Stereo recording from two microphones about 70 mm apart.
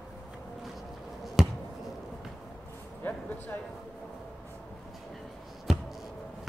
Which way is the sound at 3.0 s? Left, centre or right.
Left.